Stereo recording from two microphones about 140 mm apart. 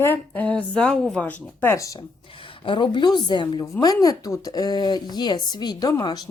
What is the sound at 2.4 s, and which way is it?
Speech, 35° left (ahead or behind).